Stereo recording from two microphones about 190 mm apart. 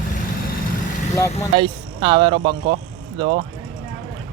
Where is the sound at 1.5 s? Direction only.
25° right (ahead or behind).